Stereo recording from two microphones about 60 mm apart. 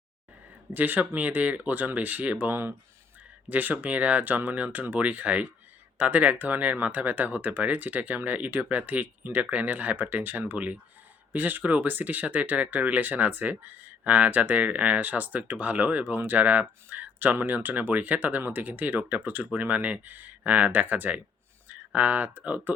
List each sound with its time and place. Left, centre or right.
0.7 s speech: right